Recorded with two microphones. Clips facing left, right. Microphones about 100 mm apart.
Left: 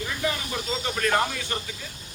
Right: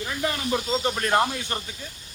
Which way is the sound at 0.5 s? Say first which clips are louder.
Right 4 dB; 35° right (ahead or behind).